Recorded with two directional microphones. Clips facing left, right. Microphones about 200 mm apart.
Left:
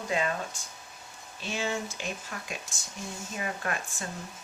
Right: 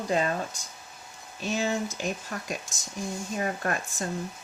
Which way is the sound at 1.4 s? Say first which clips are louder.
Right 4 dB; 45° right (ahead or behind).